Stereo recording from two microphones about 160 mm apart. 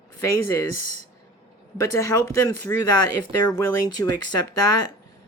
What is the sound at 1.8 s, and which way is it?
Speech, 20° left (ahead or behind).